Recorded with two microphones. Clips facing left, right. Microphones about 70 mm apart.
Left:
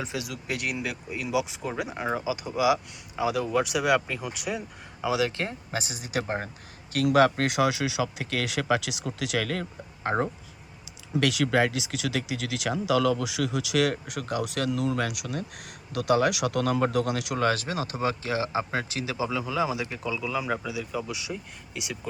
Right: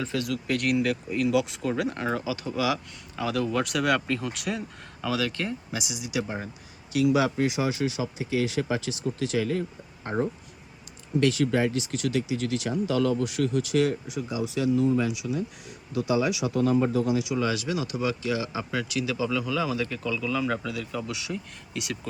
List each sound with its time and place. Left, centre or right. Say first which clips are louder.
0.0 s speech: right 4 dB; centre
5.4 s speech: even; left; by 21.9 s centre